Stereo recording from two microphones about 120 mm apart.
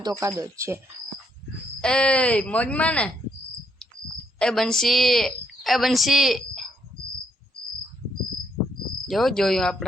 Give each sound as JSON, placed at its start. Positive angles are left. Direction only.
{"t": 0.0, "sound": "speech", "side_deg": -30}
{"t": 1.8, "sound": "speech", "side_deg": 10}
{"t": 4.4, "sound": "a woman's voice", "side_deg": 5}
{"t": 9.0, "sound": "cricket", "side_deg": 0}